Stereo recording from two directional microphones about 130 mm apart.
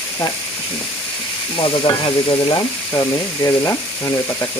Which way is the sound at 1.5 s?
40° left (ahead or behind).